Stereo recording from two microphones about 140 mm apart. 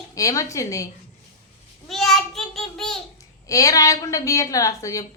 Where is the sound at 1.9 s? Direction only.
Centre (ahead or behind).